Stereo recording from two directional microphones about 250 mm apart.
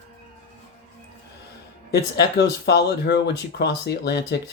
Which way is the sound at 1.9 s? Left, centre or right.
Left.